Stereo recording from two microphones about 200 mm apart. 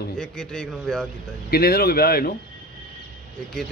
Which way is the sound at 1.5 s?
50° left (ahead or behind).